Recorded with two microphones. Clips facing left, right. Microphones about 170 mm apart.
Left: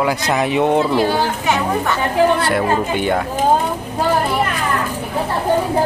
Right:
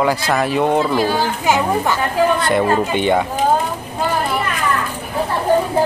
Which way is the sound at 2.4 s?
5° left (ahead or behind).